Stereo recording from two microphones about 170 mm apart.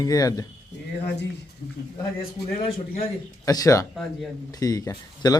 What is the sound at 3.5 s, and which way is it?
Speech, 20° left (ahead or behind).